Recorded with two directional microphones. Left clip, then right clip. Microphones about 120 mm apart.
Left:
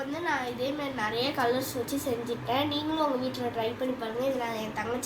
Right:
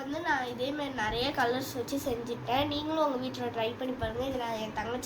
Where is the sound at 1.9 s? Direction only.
55° right (ahead or behind).